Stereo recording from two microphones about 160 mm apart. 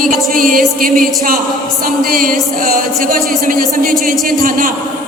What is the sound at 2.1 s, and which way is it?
Speech, 60° right (ahead or behind).